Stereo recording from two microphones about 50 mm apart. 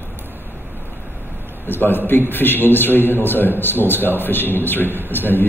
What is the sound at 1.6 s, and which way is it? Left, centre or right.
A man's voice, left.